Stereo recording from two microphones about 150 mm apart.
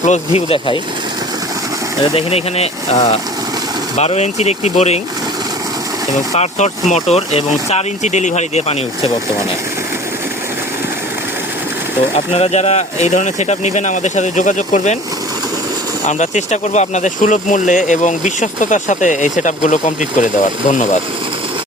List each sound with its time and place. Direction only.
0.0 s speech: 50° left (ahead or behind)
2.1 s speech: 45° left (ahead or behind)
6.3 s speech: 50° left (ahead or behind)
12.1 s speech: 45° left (ahead or behind)
16.0 s speech: 50° left (ahead or behind)